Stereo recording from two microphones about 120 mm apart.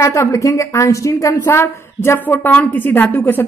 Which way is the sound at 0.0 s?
25° left (ahead or behind).